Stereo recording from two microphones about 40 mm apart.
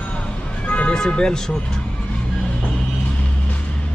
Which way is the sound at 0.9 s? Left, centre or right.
Centre.